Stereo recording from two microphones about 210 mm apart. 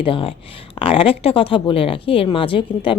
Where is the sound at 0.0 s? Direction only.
25° left (ahead or behind).